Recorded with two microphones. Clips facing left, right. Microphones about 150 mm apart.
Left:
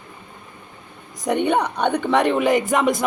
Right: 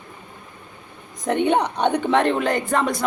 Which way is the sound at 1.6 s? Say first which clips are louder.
Even; 30° right (ahead or behind).